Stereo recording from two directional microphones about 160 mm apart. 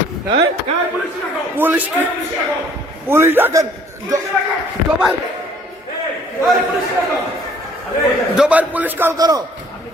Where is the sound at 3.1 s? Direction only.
15° right (ahead or behind).